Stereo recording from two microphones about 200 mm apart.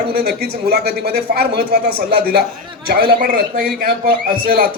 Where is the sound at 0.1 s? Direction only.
50° right (ahead or behind).